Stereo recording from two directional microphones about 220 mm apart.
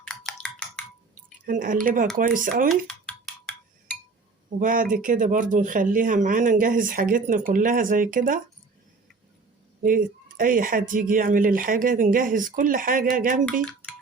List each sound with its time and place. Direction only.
0.0 s a sound: centre (ahead or behind)
1.5 s speech: 35° right (ahead or behind)
2.8 s dishes: centre (ahead or behind)
4.4 s speech: 40° right (ahead or behind)
9.8 s speech: 40° right (ahead or behind)
13.4 s music: 5° left (ahead or behind)